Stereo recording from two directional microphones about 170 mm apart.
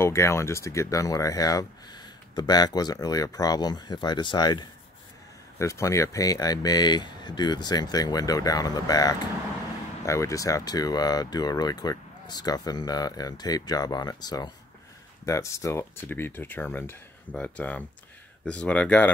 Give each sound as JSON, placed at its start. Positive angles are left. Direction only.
{"t": 0.0, "sound": "speech", "side_deg": 15}